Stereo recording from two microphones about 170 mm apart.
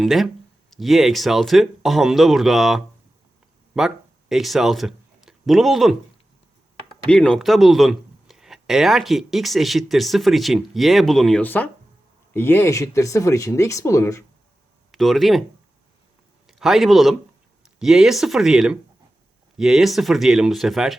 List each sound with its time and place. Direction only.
0.0 s speech: centre (ahead or behind)
7.1 s speech: 5° left (ahead or behind)
14.9 s speech: centre (ahead or behind)
16.5 s speech: centre (ahead or behind)